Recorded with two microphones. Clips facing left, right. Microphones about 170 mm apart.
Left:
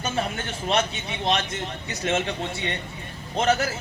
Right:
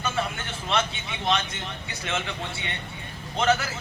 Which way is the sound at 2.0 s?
35° left (ahead or behind).